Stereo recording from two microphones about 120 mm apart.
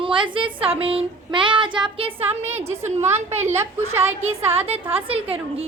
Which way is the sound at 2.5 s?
20° right (ahead or behind).